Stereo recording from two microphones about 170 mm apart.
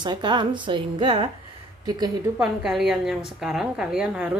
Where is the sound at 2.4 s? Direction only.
Centre (ahead or behind).